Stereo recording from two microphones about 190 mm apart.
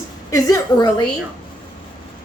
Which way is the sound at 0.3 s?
15° left (ahead or behind).